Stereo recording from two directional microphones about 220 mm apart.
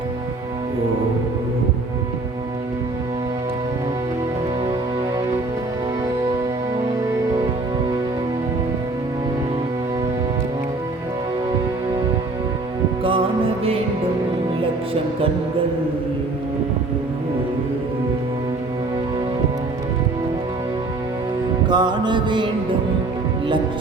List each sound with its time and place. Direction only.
13.0 s music: 25° right (ahead or behind)
21.7 s music: 20° right (ahead or behind)